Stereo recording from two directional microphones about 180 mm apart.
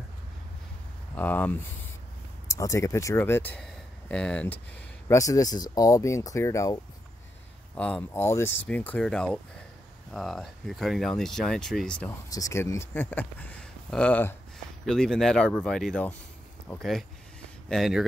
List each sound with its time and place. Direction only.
1.1 s speech: 10° left (ahead or behind)
5.0 s speech: 15° left (ahead or behind)
7.7 s speech: 5° left (ahead or behind)
12.3 s speech: 20° left (ahead or behind)
16.7 s a sound: centre (ahead or behind)